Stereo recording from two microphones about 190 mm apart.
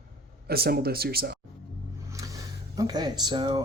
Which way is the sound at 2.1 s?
15° right (ahead or behind).